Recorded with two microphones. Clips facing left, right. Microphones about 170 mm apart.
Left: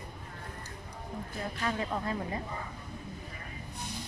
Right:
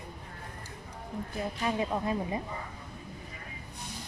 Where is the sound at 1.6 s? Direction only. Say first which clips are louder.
Right 3 dB; 15° right (ahead or behind).